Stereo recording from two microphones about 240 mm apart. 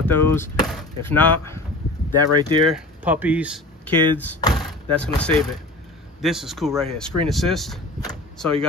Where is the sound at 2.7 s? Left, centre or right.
Centre.